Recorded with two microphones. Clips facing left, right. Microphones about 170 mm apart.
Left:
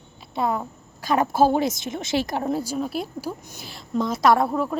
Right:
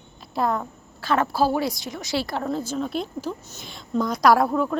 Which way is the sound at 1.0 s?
15° left (ahead or behind).